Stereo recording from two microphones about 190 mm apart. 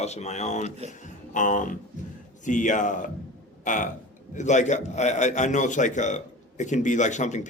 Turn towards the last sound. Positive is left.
turn(degrees=40)  # may be behind; listen again after turning